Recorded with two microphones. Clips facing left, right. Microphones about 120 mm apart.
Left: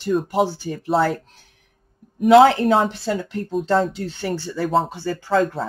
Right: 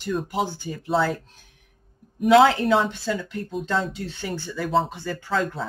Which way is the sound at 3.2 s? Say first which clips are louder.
Left 5 dB; 40° left (ahead or behind).